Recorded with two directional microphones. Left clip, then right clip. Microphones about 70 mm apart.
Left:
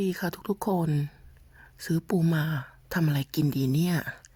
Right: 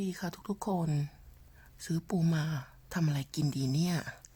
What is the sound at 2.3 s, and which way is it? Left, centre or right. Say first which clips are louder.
Speech: left 6 dB; left.